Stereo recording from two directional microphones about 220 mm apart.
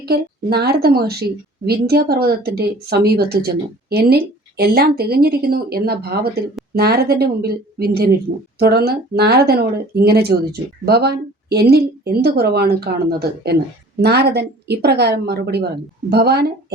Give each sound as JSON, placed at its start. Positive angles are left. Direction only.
{"t": 0.0, "sound": "a woman's voice", "side_deg": -45}